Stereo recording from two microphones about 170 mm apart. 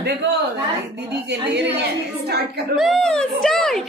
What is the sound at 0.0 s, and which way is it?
A woman's voice, 80° right.